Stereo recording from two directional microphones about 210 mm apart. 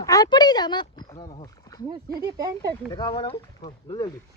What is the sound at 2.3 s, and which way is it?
Speech, 15° right (ahead or behind).